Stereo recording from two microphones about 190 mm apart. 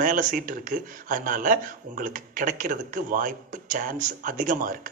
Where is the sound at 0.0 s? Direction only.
45° right (ahead or behind).